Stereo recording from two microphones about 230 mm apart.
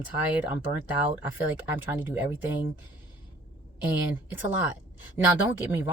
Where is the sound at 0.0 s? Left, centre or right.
Centre.